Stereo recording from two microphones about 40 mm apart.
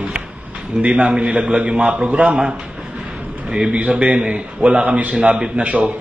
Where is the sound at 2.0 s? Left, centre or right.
Right.